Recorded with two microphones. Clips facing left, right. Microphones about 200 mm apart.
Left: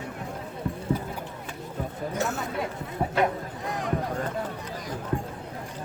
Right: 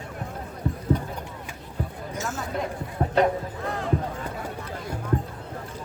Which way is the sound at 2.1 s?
65° left (ahead or behind).